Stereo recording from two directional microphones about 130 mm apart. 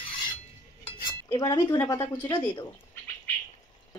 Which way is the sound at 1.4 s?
30° left (ahead or behind).